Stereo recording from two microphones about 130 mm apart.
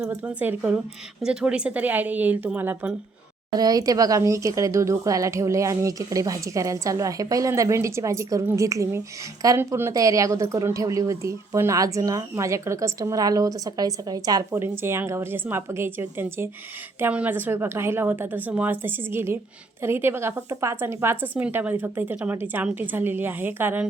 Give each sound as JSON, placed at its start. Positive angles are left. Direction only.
{"t": 0.2, "sound": "a woman's voice", "side_deg": -10}
{"t": 3.5, "sound": "speech", "side_deg": -30}
{"t": 14.5, "sound": "a woman's voice", "side_deg": -20}